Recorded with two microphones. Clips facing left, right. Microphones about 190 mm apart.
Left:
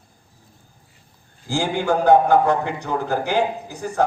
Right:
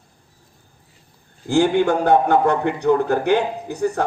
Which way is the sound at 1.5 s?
65° right (ahead or behind).